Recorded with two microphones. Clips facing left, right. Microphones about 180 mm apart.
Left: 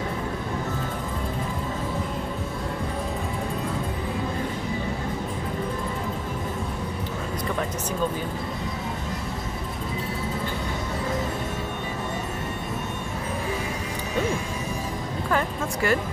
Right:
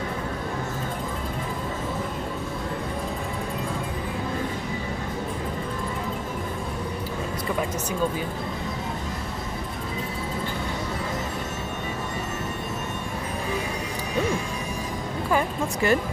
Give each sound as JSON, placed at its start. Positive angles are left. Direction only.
{"t": 15.3, "sound": "music", "side_deg": -20}